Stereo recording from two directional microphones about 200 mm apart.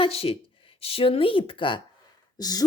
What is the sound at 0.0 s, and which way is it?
A woman's voice, 30° left (ahead or behind).